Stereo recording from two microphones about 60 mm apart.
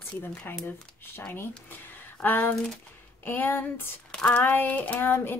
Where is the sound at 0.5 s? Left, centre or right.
Left.